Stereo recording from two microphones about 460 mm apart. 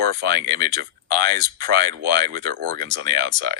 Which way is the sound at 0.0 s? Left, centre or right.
Right.